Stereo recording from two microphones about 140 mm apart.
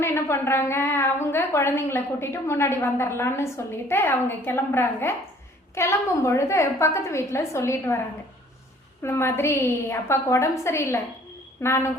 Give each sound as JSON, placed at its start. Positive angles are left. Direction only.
{"t": 0.0, "sound": "a woman's voice", "side_deg": 20}
{"t": 9.0, "sound": "a woman's voice", "side_deg": 20}